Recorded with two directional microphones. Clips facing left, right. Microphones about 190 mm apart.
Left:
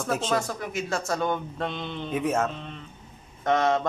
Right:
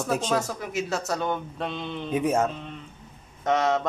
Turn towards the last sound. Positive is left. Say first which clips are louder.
# even
turn(degrees=-5)  # may be behind; listen again after turning